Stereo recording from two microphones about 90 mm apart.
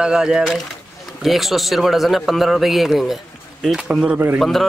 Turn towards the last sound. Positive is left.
turn(degrees=0)  # may be behind; listen again after turning